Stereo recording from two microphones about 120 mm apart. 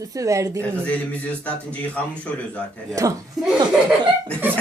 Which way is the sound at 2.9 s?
30° right (ahead or behind).